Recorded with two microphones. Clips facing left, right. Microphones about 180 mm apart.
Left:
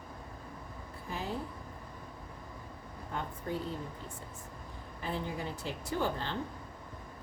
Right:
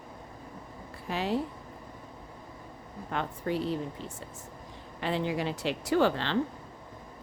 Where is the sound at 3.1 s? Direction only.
85° right.